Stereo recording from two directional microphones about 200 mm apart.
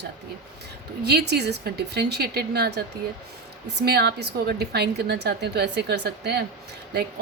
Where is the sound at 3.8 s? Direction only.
55° right (ahead or behind).